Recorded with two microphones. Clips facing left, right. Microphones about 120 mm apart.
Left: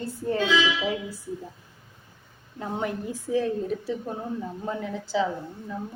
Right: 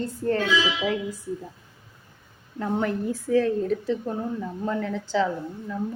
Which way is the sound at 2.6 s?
15° left (ahead or behind).